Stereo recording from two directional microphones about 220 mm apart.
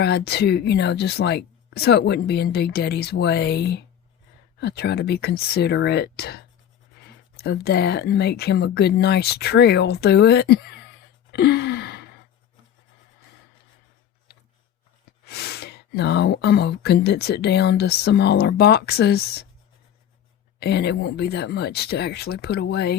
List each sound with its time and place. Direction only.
0.0 s speech: 50° left (ahead or behind)
11.3 s gasp: 50° left (ahead or behind)
15.2 s speech: 50° left (ahead or behind)
20.6 s speech: 50° left (ahead or behind)